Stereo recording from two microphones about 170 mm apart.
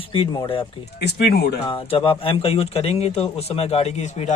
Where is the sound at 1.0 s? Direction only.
70° left (ahead or behind).